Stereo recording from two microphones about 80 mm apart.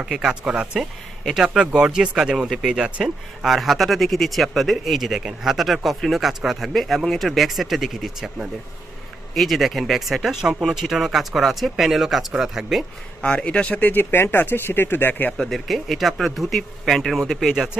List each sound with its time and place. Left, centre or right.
0.0 s speech: centre
13.2 s speech: centre
15.3 s speech: centre